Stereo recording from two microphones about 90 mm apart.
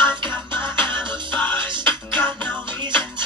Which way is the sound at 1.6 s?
60° right (ahead or behind).